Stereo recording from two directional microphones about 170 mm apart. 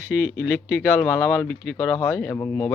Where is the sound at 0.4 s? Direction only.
15° left (ahead or behind).